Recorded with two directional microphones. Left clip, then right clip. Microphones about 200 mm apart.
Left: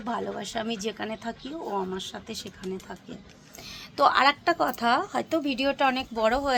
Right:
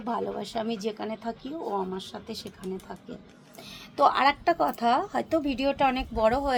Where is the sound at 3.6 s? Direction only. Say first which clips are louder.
Even; centre (ahead or behind).